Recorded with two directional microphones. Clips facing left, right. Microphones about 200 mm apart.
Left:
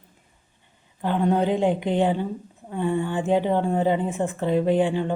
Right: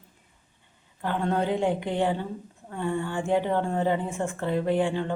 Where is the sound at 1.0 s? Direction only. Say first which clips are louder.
Left 5 dB; 15° left (ahead or behind).